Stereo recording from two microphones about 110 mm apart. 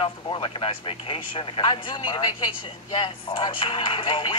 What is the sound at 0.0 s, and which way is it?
Speech, 50° left (ahead or behind).